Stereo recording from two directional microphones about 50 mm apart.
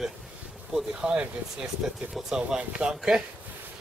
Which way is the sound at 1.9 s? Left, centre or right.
Centre.